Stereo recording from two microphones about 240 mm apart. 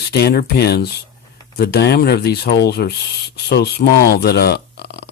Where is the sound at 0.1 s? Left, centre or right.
Left.